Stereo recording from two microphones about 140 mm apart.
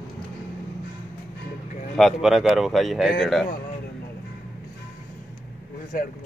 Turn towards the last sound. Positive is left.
turn(degrees=80)